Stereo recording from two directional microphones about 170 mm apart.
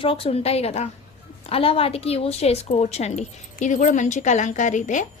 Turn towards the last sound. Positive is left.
turn(degrees=45)  # may be behind; listen again after turning